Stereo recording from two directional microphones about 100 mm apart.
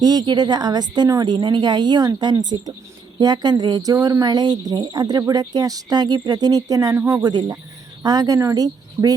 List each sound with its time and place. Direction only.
0.0 s speech: 40° right (ahead or behind)